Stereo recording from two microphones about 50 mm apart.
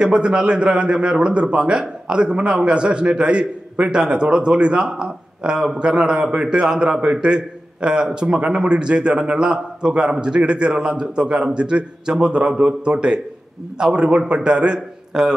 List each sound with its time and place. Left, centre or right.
0.0 s a man's voice: centre